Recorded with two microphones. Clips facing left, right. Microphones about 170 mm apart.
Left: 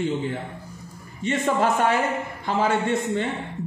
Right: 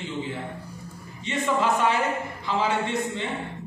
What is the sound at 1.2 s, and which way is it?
A man's voice, 50° left (ahead or behind).